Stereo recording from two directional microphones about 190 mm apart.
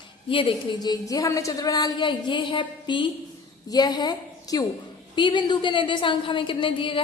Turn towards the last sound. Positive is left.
turn(degrees=25)  # may be behind; listen again after turning